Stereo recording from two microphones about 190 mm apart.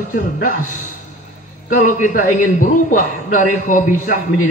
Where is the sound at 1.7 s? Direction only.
45° left (ahead or behind).